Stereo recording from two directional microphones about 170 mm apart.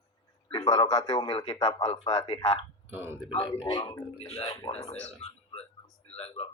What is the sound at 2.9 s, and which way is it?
Speech, 15° right (ahead or behind).